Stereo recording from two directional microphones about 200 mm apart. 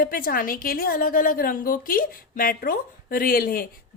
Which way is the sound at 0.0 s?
45° left (ahead or behind).